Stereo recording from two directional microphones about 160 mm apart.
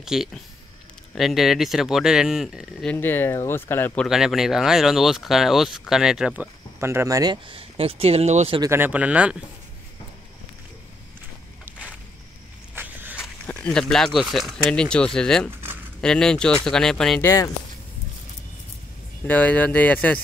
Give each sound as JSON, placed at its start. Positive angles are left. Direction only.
{"t": 0.0, "sound": "speech", "side_deg": 0}
{"t": 8.5, "sound": "speech", "side_deg": -15}
{"t": 12.7, "sound": "walk", "side_deg": -10}
{"t": 13.5, "sound": "speech", "side_deg": 5}
{"t": 17.2, "sound": "speech", "side_deg": 20}
{"t": 19.2, "sound": "speech", "side_deg": 10}